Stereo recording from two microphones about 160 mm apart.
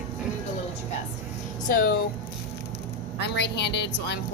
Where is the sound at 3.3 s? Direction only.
90° left.